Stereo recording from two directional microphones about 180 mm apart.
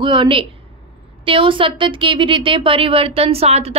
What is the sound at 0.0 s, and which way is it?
A woman's voice, 25° right (ahead or behind).